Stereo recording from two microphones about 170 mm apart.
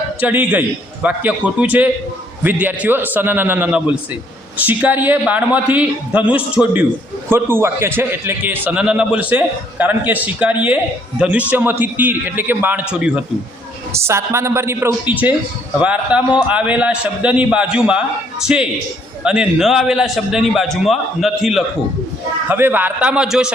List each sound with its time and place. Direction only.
0.2 s a man's voice: 10° right (ahead or behind)
13.9 s a man's voice: 15° right (ahead or behind); by 21.6 s centre (ahead or behind)
22.4 s a man's voice: 10° right (ahead or behind)